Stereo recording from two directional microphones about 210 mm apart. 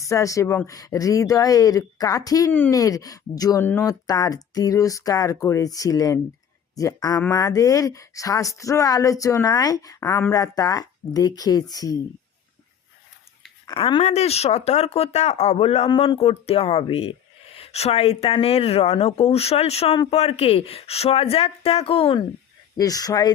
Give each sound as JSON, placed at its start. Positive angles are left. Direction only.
{"t": 0.0, "sound": "speech", "side_deg": 15}
{"t": 13.7, "sound": "speech", "side_deg": 25}